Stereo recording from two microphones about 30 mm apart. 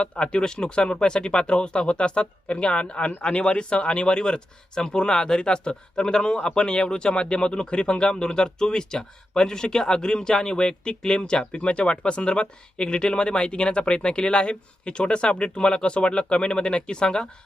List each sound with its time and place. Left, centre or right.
0.0 s speech: left
11.5 s speech: left